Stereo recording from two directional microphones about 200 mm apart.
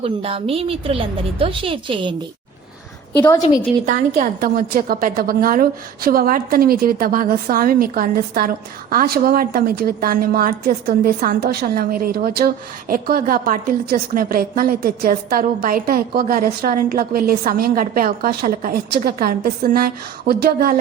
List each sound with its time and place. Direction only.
0.0 s a woman's voice: 30° right (ahead or behind)
3.2 s a woman's voice: 20° left (ahead or behind)
3.8 s a woman's voice: 40° right (ahead or behind)